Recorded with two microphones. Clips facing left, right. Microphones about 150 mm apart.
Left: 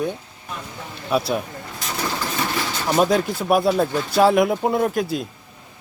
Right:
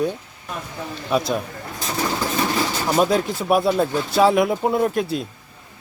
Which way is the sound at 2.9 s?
Centre (ahead or behind).